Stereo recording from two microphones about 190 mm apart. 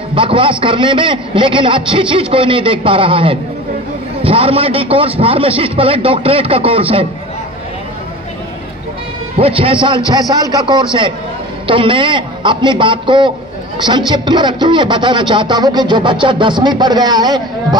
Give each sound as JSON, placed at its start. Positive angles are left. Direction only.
{"t": 0.1, "sound": "speech", "side_deg": -25}
{"t": 9.4, "sound": "speech", "side_deg": -30}